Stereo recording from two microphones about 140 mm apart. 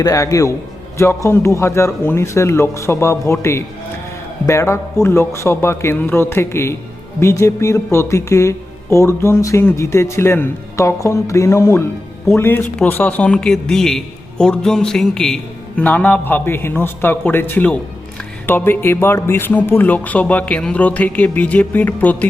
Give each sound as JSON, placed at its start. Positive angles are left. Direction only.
{"t": 0.0, "sound": "speech", "side_deg": 25}
{"t": 4.4, "sound": "a man's voice", "side_deg": 20}